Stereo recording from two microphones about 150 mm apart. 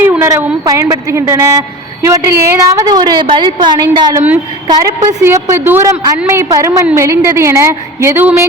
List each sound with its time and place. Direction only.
0.0 s a woman's voice: 15° right (ahead or behind)